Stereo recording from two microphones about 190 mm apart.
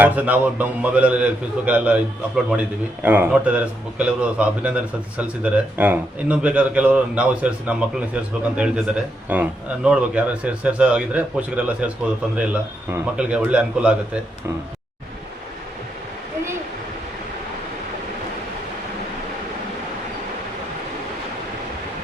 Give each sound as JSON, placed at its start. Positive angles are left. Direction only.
{"t": 0.0, "sound": "a man's voice", "side_deg": -10}